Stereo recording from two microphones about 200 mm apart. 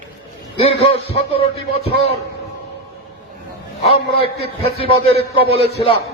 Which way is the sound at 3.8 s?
30° left (ahead or behind).